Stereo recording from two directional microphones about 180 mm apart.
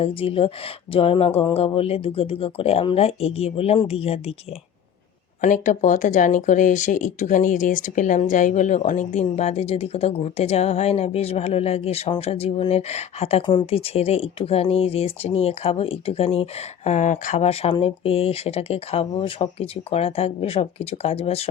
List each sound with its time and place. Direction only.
0.0 s speech: 30° left (ahead or behind)
5.4 s speech: 45° left (ahead or behind)